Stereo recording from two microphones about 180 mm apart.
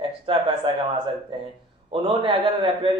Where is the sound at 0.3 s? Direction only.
25° right (ahead or behind).